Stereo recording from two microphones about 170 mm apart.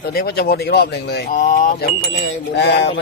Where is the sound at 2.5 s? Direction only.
80° left.